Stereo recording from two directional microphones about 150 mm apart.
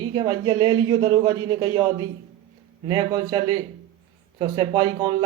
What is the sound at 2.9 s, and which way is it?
A man's voice, 25° right (ahead or behind).